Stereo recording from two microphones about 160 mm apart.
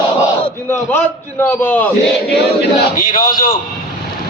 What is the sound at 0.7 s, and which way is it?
A man's voice, 15° left (ahead or behind).